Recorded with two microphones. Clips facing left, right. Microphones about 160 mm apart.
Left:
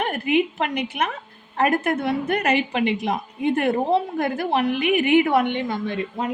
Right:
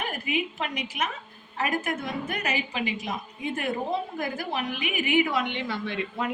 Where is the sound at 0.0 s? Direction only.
65° left (ahead or behind).